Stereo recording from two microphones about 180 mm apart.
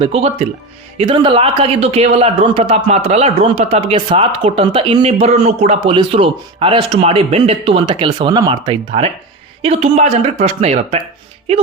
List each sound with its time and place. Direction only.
0.0 s a man's voice: 35° right (ahead or behind)